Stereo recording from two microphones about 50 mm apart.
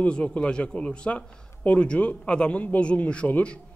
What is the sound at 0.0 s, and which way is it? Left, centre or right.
A man's voice, left.